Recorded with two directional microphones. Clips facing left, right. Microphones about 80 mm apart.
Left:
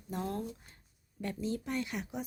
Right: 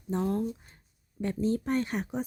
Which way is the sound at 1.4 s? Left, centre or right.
Right.